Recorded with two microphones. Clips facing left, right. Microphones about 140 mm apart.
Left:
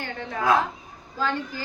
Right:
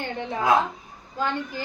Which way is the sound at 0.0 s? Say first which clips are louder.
Right 1 dB; 20° right (ahead or behind).